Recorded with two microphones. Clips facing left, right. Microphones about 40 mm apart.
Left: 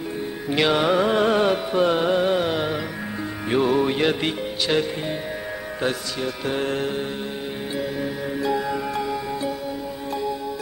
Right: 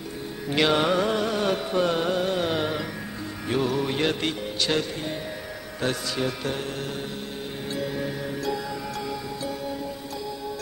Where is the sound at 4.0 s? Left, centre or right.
Centre.